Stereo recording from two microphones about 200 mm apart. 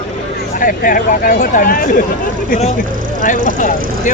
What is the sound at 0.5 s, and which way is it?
Speech, 45° left (ahead or behind).